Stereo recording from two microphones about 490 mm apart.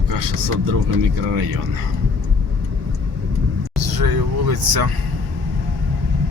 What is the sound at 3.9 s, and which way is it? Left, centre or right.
Speech, right.